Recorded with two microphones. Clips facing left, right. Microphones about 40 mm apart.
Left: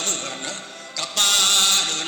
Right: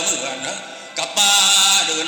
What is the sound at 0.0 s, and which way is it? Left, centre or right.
Speech, right.